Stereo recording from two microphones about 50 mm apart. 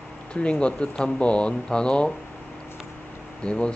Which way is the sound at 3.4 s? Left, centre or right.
Left.